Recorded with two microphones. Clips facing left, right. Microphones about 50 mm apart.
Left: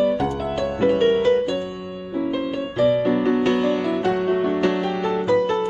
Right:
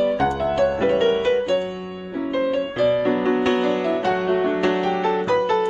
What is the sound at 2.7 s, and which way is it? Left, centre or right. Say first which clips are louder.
Music: left 3 dB; right.